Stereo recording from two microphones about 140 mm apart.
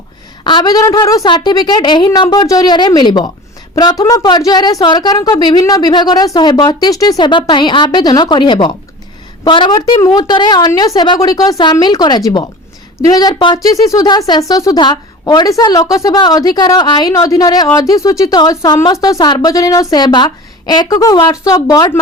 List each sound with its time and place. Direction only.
0.4 s a woman's voice: 30° left (ahead or behind)